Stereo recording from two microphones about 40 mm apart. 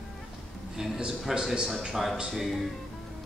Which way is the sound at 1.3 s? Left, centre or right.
Centre.